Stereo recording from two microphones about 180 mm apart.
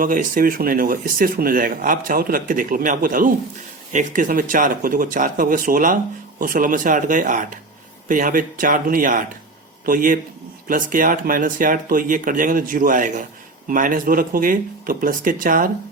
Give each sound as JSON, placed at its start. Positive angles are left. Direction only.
{"t": 0.0, "sound": "speech", "side_deg": -50}